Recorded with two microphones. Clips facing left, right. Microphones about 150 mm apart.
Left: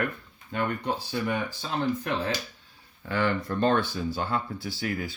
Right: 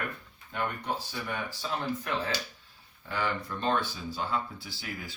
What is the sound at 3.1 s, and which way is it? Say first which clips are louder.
Speech: left 6 dB; 60° left (ahead or behind).